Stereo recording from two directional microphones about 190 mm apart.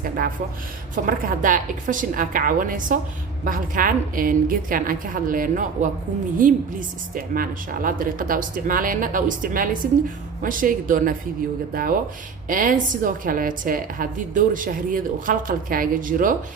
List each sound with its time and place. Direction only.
1.0 s a woman's voice: 45° right (ahead or behind)